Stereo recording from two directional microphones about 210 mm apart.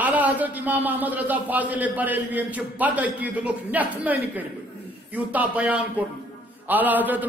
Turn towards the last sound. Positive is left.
turn(degrees=-10)  # may be behind; listen again after turning